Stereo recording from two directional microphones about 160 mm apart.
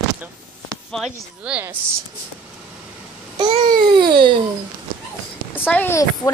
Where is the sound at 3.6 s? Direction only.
65° right (ahead or behind).